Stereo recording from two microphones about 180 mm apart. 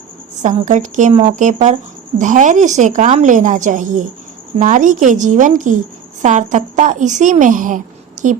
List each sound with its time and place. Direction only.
0.4 s a woman's voice: 45° right (ahead or behind)